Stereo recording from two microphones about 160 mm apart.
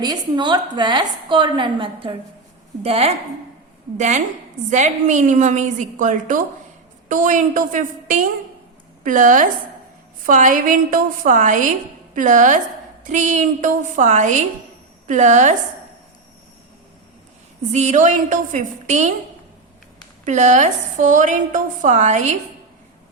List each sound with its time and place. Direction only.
0.0 s a woman's voice: 25° right (ahead or behind); by 15.5 s 50° right (ahead or behind)
17.7 s a woman's voice: 50° right (ahead or behind)
20.2 s a woman's voice: 50° right (ahead or behind)